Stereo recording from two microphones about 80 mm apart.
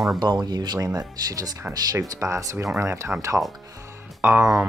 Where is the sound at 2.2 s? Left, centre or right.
Right.